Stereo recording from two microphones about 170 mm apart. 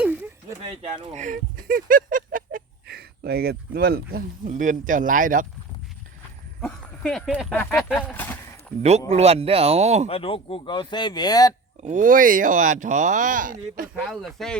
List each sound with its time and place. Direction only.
0.0 s a sound: 10° right (ahead or behind)
0.8 s speech: 45° right (ahead or behind); by 4.3 s 65° right (ahead or behind)
4.4 s speech: 45° right (ahead or behind)
6.6 s speech: 5° left (ahead or behind)
7.5 s speech: 10° left (ahead or behind)
7.8 s speech: centre (ahead or behind)
8.0 s speech: 10° left (ahead or behind)
9.0 s speech: 40° right (ahead or behind)
10.1 s speech: 35° left (ahead or behind)
11.8 s speech: 50° right (ahead or behind)
14.1 s speech: centre (ahead or behind)